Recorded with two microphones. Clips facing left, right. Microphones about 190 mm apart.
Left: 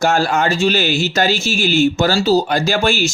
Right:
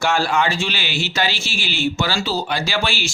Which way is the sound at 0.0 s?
45° left (ahead or behind).